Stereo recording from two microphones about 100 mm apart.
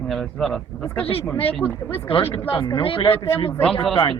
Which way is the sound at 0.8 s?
20° left (ahead or behind).